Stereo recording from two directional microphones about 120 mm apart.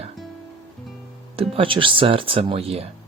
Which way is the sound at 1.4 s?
50° right (ahead or behind).